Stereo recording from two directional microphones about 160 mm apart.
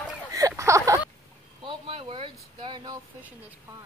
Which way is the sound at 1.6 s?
35° right (ahead or behind).